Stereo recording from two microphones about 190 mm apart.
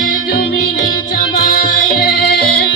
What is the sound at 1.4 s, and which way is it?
Music, 50° left (ahead or behind).